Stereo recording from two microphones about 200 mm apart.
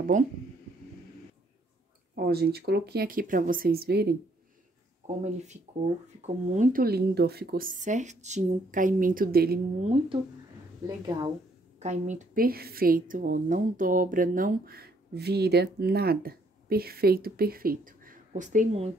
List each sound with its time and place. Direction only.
2.1 s a woman's voice: 50° right (ahead or behind)
5.0 s a woman's voice: 35° right (ahead or behind)
9.8 s a woman's voice: 35° right (ahead or behind)
11.8 s a woman's voice: 35° right (ahead or behind)